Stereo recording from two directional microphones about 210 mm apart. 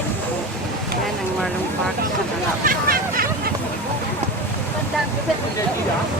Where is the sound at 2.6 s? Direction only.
45° right (ahead or behind).